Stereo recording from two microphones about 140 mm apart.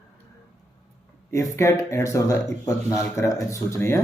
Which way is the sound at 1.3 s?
20° left (ahead or behind).